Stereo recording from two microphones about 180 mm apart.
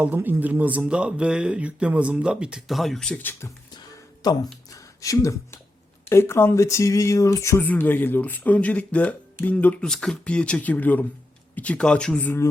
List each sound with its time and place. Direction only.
0.0 s speech: 10° right (ahead or behind); by 3.5 s 10° left (ahead or behind)
4.2 s speech: 20° left (ahead or behind)